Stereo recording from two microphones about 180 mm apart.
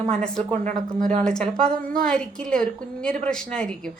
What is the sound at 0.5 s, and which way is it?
Speech, 45° right (ahead or behind).